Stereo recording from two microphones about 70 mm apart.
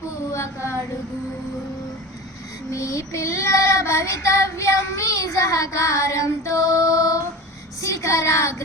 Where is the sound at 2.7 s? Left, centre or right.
Left.